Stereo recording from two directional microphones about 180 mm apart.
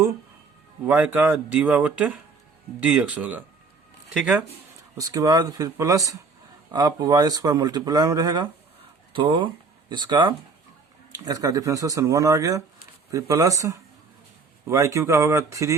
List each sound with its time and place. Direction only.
0.9 s speech: 10° right (ahead or behind)
4.9 s speech: 20° right (ahead or behind)